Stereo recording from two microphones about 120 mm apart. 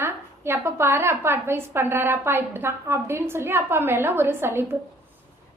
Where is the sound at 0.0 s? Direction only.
20° right (ahead or behind).